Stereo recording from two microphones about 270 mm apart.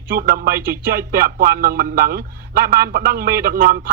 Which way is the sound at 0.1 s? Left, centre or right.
Right.